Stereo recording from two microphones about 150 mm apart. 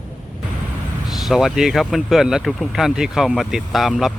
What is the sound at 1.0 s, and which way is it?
Speech, centre (ahead or behind).